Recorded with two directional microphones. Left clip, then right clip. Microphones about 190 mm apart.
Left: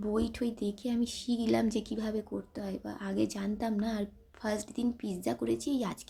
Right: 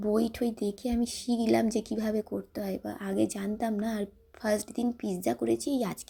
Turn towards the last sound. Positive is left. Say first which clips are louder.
# right 3 dB
turn(degrees=-15)  # may be behind; listen again after turning